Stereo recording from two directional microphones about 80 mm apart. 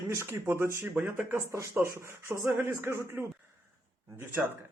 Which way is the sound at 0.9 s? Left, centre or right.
Right.